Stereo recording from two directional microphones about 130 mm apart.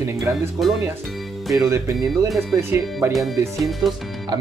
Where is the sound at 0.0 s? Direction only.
20° right (ahead or behind).